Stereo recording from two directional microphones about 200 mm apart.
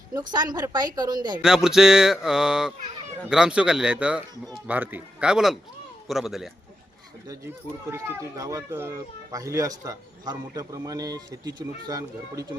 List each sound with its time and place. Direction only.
0.1 s a woman's voice: 20° right (ahead or behind)
1.4 s speech: 5° right (ahead or behind)
7.3 s speech: 15° right (ahead or behind)